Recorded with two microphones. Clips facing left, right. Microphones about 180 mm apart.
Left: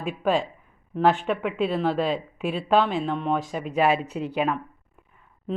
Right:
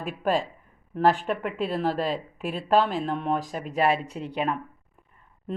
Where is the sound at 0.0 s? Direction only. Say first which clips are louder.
Left 2 dB; 40° right (ahead or behind).